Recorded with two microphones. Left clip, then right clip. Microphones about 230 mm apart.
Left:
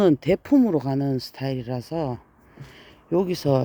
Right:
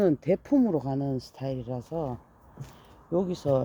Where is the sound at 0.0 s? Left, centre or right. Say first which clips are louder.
Left 5 dB; left.